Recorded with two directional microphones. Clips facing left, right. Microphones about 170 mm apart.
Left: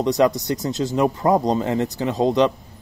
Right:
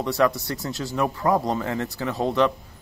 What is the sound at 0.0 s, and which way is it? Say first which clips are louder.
Speech: left 4 dB; 20° left (ahead or behind).